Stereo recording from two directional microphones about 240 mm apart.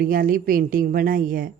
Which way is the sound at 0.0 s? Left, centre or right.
Right.